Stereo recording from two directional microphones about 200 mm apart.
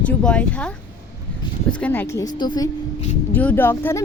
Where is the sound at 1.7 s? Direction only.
10° left (ahead or behind).